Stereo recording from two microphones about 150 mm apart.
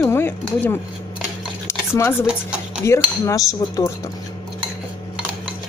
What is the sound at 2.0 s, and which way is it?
Speech, 15° left (ahead or behind).